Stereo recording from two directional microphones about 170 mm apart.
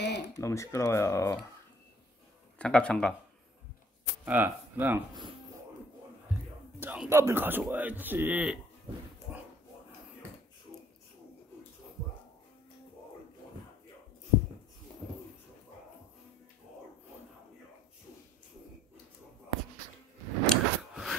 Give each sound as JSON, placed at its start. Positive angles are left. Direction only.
{"t": 0.0, "sound": "a sound", "side_deg": 85}
{"t": 0.4, "sound": "speech", "side_deg": 15}
{"t": 2.6, "sound": "speech", "side_deg": 5}
{"t": 4.2, "sound": "speech", "side_deg": -10}
{"t": 6.3, "sound": "music", "side_deg": -10}
{"t": 6.8, "sound": "a man's voice", "side_deg": -10}
{"t": 20.4, "sound": "a sound", "side_deg": 0}